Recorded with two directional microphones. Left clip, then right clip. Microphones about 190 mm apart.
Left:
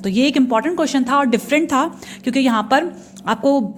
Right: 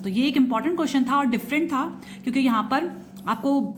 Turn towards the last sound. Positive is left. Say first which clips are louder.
# left 7 dB
turn(degrees=35)  # may be behind; listen again after turning